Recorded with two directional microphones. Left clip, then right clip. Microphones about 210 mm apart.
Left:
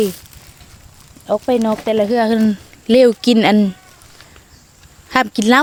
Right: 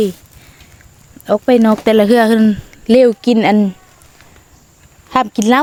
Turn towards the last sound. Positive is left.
turn(degrees=-10)  # may be behind; listen again after turning